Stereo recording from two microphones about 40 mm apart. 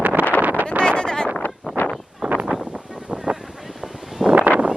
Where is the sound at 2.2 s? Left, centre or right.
Centre.